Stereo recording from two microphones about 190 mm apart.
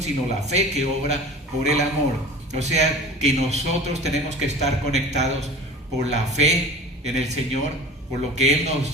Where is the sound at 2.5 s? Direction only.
35° right (ahead or behind).